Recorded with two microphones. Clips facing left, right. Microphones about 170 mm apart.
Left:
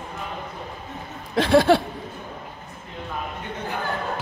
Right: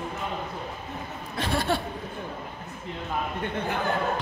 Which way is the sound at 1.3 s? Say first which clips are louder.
Left 11 dB; 90° left.